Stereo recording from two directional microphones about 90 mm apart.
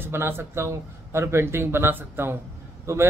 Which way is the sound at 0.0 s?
25° right (ahead or behind).